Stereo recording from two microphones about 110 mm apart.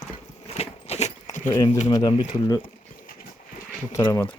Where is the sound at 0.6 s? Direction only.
75° left (ahead or behind).